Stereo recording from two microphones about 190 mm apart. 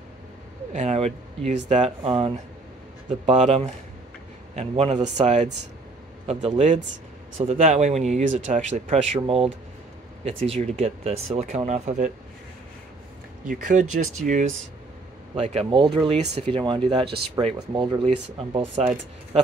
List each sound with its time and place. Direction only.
0.7 s speech: 35° right (ahead or behind)
13.5 s speech: 40° right (ahead or behind)